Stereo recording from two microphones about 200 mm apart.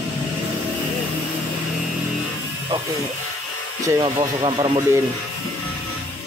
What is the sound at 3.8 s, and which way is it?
Speech, 20° right (ahead or behind).